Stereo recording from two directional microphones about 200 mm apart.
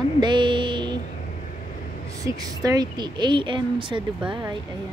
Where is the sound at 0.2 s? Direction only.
25° right (ahead or behind).